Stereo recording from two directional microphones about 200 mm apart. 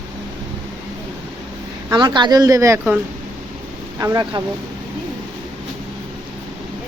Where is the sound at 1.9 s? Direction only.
20° right (ahead or behind).